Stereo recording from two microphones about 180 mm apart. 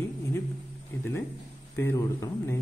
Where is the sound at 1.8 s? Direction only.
15° left (ahead or behind).